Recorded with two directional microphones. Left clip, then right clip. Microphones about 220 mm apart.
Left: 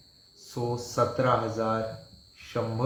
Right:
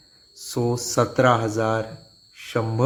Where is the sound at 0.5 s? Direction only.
55° right (ahead or behind).